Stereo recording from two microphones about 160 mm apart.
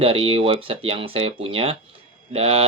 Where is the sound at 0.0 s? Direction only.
35° right (ahead or behind).